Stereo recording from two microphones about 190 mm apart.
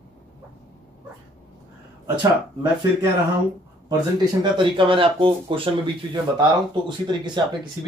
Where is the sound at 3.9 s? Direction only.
25° right (ahead or behind).